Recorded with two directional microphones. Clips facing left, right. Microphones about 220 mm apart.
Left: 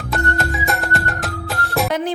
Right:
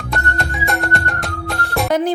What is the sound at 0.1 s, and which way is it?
Music, centre (ahead or behind).